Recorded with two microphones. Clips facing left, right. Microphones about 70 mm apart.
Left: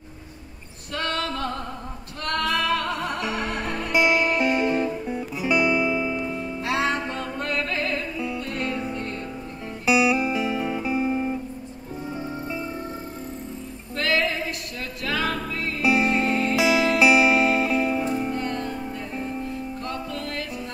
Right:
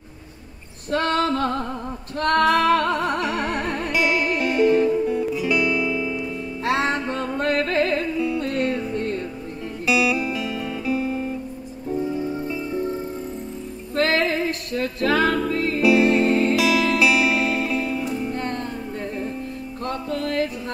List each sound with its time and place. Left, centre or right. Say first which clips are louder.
0.9 s female singing: right 7 dB; right
2.1 s music: right 7 dB; right
3.9 s music: left 2 dB; left
6.6 s music: right 3 dB; right
9.8 s guitar: left 1 dB; left
13.9 s music: right 4 dB; right
15.8 s music: right 4 dB; left
16.3 s music: right 4 dB; right
16.5 s music: right 1 dB; left
18.3 s music: right 1 dB; right
19.9 s music: right 9 dB; right